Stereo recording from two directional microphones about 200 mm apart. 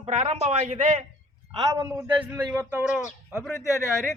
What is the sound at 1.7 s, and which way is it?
A man's voice, 15° right (ahead or behind).